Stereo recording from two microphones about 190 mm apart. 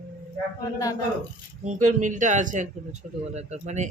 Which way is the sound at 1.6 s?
40° right (ahead or behind).